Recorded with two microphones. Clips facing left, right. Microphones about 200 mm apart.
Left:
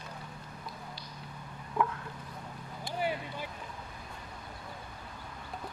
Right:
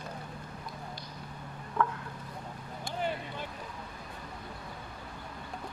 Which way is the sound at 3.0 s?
10° left (ahead or behind).